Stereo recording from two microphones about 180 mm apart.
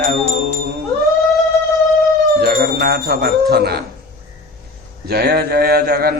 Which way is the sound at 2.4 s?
60° right (ahead or behind).